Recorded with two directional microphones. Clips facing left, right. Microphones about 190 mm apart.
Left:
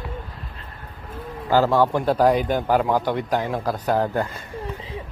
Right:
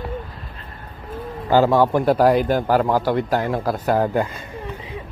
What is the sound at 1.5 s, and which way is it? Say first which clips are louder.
Speech: right 3 dB; 15° right (ahead or behind).